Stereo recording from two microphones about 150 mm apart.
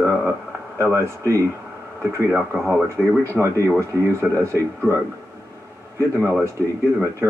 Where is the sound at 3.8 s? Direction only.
20° right (ahead or behind).